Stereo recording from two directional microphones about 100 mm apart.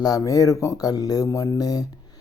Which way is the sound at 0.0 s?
35° left (ahead or behind).